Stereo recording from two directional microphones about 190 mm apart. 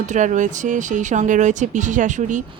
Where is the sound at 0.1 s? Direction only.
40° right (ahead or behind).